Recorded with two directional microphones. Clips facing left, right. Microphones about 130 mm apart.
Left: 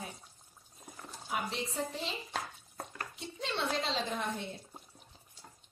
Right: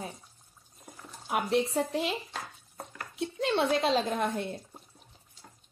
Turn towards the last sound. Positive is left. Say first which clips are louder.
# right 7 dB
turn(degrees=-55)  # may be behind; listen again after turning